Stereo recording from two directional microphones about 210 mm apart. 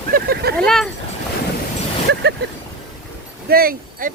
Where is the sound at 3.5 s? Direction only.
45° right (ahead or behind).